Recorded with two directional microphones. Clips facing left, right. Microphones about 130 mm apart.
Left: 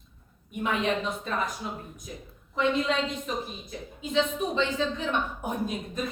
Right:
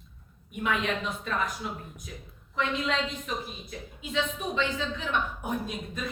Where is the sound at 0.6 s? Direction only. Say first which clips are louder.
Left 2 dB; 30° left (ahead or behind).